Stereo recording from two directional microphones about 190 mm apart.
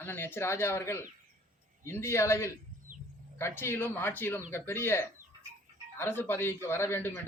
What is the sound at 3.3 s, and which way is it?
A man's voice, 10° left (ahead or behind).